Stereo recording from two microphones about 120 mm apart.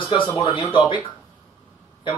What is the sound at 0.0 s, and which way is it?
Speech, 45° left (ahead or behind).